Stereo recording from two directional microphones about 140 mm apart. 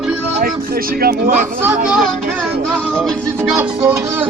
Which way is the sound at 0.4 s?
90° right.